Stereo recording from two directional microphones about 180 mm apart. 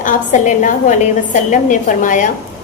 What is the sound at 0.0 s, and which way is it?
A woman's voice, 45° left (ahead or behind).